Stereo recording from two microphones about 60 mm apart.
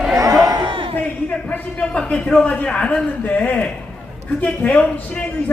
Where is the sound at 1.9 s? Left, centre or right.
Centre.